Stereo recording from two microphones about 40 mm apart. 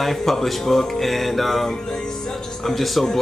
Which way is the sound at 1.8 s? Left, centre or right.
Centre.